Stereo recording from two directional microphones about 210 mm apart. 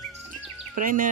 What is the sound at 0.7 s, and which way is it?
Speech, 40° right (ahead or behind).